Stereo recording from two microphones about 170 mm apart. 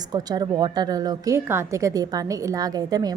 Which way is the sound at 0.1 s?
25° right (ahead or behind).